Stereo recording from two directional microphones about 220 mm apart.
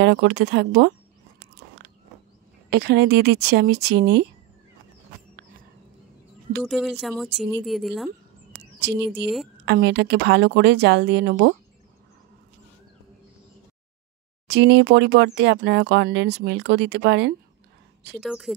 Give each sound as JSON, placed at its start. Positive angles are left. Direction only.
{"t": 0.0, "sound": "speech", "side_deg": -55}
{"t": 2.7, "sound": "speech", "side_deg": -50}
{"t": 6.6, "sound": "speech", "side_deg": 0}
{"t": 9.2, "sound": "speech", "side_deg": 0}
{"t": 9.7, "sound": "speech", "side_deg": -50}
{"t": 14.5, "sound": "speech", "side_deg": -55}
{"t": 18.2, "sound": "speech", "side_deg": 0}